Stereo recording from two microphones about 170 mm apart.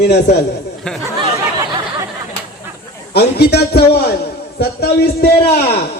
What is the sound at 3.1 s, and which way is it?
A man's voice, 75° left (ahead or behind).